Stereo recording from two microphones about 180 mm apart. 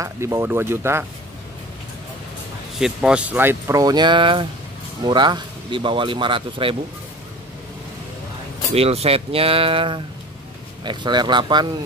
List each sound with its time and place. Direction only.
0.0 s speech: 15° right (ahead or behind)
2.7 s speech: 5° right (ahead or behind); by 6.8 s 30° right (ahead or behind)
8.7 s speech: 35° right (ahead or behind)